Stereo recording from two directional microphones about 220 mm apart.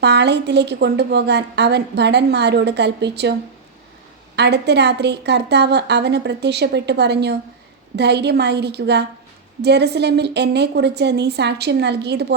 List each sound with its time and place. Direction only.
0.0 s a woman's voice: 50° right (ahead or behind)
4.4 s a woman's voice: 50° right (ahead or behind)